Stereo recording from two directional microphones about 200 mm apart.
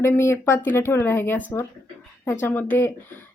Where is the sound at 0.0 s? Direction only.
15° left (ahead or behind).